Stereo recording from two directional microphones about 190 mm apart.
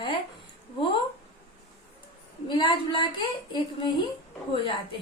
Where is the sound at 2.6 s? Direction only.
25° left (ahead or behind).